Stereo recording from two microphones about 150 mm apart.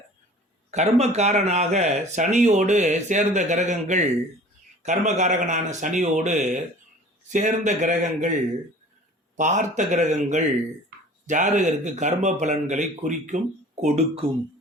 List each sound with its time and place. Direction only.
0.7 s speech: 45° right (ahead or behind)
9.3 s speech: 55° right (ahead or behind)